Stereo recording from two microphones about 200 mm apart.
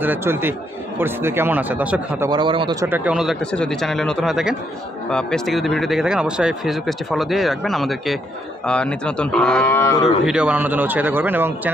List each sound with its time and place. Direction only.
0.0 s speech: 10° right (ahead or behind)
2.2 s speech: 25° right (ahead or behind); by 10.0 s 15° left (ahead or behind)
10.0 s speech: 5° right (ahead or behind)